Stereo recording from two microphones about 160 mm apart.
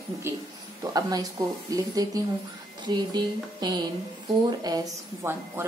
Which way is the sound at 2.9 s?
25° right (ahead or behind).